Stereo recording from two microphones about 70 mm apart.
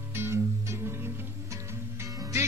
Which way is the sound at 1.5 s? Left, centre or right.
Right.